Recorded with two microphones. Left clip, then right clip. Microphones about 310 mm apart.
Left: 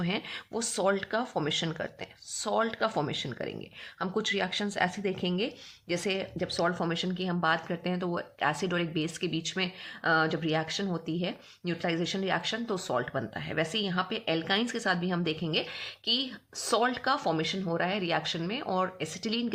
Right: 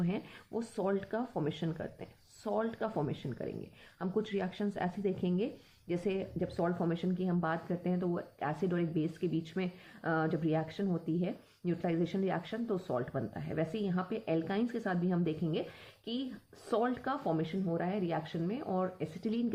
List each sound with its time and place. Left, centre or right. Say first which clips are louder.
0.6 s speech: left 7 dB; centre